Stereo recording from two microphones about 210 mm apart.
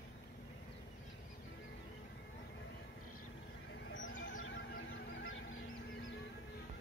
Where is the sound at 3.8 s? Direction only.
65° left (ahead or behind).